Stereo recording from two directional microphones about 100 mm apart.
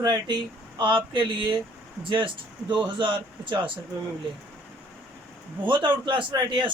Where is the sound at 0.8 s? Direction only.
55° right (ahead or behind).